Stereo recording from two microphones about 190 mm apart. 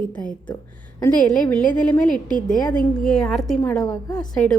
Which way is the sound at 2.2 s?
45° left (ahead or behind).